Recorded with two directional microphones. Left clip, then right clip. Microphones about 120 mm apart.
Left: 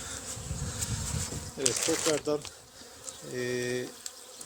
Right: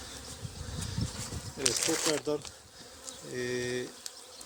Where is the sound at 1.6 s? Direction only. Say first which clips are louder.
Left 1 dB; 40° right (ahead or behind).